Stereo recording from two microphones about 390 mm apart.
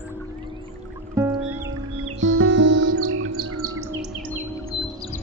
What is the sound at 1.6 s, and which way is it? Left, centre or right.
Music, right.